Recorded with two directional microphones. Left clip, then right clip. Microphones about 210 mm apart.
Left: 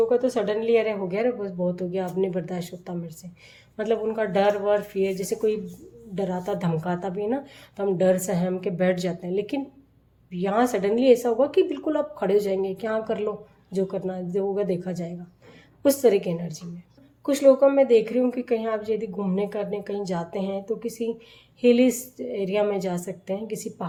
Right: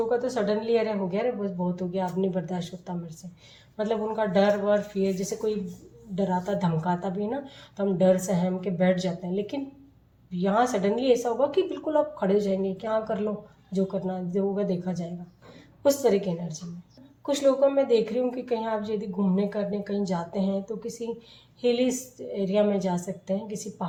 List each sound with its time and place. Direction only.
0.1 s a woman's voice: 45° left (ahead or behind)